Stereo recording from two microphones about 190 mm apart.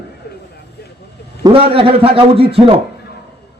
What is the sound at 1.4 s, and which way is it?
A man's voice, 30° right (ahead or behind).